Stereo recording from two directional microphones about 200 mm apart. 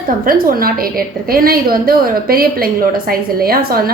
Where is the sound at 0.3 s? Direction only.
45° right (ahead or behind).